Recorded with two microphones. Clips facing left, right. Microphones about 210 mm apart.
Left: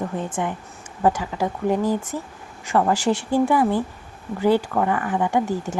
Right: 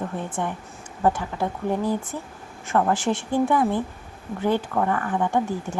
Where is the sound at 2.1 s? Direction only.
10° left (ahead or behind).